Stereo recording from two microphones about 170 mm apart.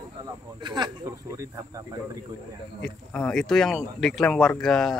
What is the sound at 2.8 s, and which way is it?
Speech, 5° left (ahead or behind).